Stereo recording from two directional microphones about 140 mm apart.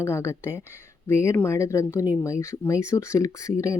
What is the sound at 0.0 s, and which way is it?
Speech, 20° left (ahead or behind).